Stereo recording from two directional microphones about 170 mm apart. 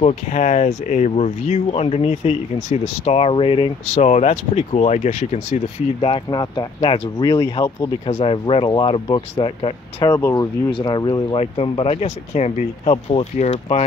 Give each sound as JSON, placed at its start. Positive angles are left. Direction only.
{"t": 0.0, "sound": "speech", "side_deg": 45}
{"t": 3.9, "sound": "speech", "side_deg": 40}
{"t": 10.1, "sound": "speech", "side_deg": 20}